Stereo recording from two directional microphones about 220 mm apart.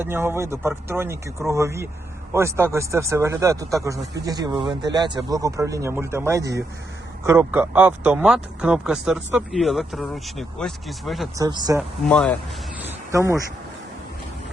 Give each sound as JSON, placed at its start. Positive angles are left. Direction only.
{"t": 0.0, "sound": "speech", "side_deg": -10}
{"t": 11.3, "sound": "speech", "side_deg": -20}
{"t": 11.8, "sound": "speech", "side_deg": 5}
{"t": 13.1, "sound": "speech", "side_deg": -15}